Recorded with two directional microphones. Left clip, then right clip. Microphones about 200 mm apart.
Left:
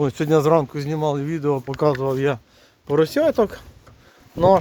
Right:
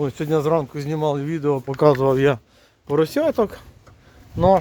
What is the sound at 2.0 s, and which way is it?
Speech, 65° right (ahead or behind).